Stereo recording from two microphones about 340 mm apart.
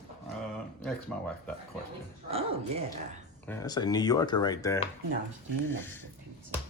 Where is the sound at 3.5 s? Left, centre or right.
Centre.